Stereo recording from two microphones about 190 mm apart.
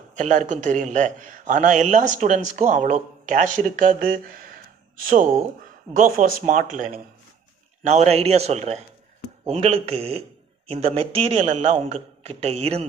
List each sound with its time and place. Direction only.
0.2 s a man's voice: 40° right (ahead or behind)
7.9 s a man's voice: 35° right (ahead or behind)